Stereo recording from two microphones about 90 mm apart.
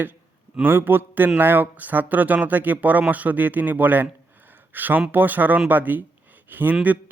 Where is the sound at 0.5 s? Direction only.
20° right (ahead or behind).